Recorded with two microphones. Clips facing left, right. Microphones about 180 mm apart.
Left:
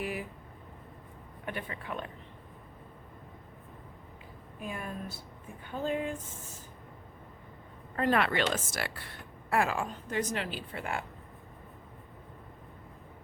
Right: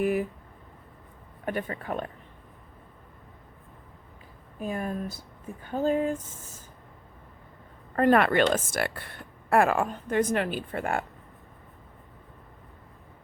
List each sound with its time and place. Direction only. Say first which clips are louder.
0.0 s a sound: right 10 dB; 50° right (ahead or behind)
1.5 s speech: right 7 dB; 45° right (ahead or behind)
4.6 s speech: right 7 dB; 40° right (ahead or behind)
7.9 s speech: right 7 dB; 50° right (ahead or behind)